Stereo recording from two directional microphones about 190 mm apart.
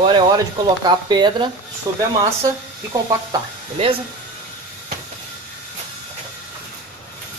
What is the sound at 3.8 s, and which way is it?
Speech, 30° right (ahead or behind).